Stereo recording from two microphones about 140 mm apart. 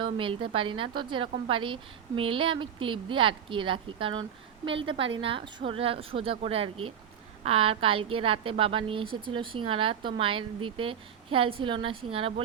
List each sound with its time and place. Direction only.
0.0 s a woman's voice: 35° right (ahead or behind)